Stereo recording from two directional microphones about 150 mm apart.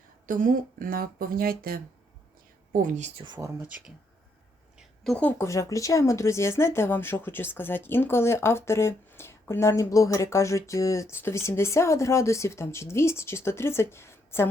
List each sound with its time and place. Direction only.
0.3 s speech: 65° right (ahead or behind)
2.7 s a woman's voice: 55° right (ahead or behind)
3.2 s speech: 30° right (ahead or behind)
5.0 s speech: 10° left (ahead or behind)